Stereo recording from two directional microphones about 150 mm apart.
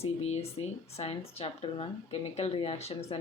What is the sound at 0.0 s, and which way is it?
Speech, 45° left (ahead or behind).